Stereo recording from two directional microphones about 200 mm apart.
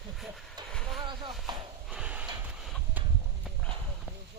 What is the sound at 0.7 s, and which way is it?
Speech, 5° left (ahead or behind).